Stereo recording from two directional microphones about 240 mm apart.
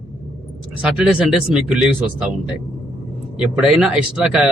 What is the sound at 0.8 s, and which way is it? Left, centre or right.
Speech, centre.